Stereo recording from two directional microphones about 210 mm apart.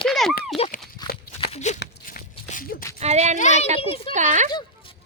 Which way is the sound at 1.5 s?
35° left (ahead or behind).